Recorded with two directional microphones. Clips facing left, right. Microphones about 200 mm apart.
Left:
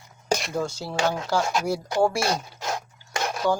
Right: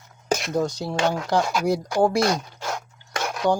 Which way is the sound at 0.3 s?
Centre (ahead or behind).